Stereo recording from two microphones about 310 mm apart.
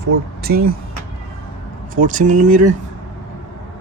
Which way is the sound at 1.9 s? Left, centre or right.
Right.